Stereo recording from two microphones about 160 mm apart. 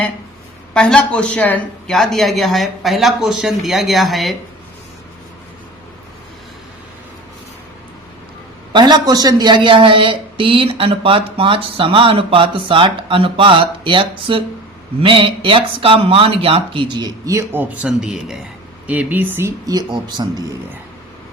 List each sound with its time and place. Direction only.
0.7 s speech: 5° left (ahead or behind)
8.7 s speech: 25° right (ahead or behind)